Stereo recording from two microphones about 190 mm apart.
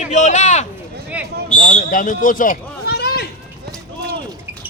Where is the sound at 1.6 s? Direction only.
40° left (ahead or behind).